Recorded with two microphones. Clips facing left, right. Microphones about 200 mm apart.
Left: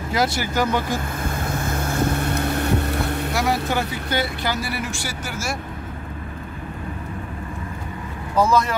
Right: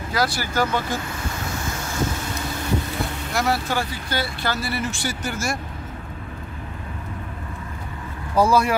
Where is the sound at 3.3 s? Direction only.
15° left (ahead or behind).